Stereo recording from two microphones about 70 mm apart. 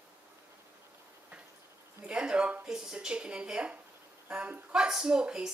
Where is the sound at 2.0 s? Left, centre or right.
Centre.